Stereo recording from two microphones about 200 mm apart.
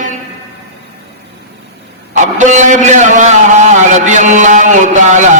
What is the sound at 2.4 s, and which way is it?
A man's voice, 35° right (ahead or behind).